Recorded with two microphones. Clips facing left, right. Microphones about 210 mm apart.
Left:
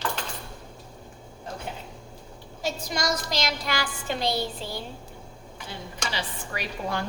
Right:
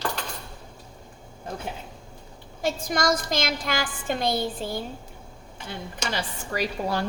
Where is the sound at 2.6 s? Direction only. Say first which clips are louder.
Right 4 dB; 50° right (ahead or behind).